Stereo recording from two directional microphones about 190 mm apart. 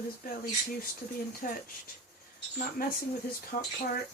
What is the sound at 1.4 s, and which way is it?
Speech, 40° left (ahead or behind).